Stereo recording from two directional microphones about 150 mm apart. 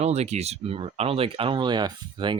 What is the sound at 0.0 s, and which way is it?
Speech, 45° right (ahead or behind).